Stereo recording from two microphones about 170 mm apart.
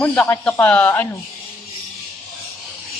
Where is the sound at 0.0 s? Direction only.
10° left (ahead or behind).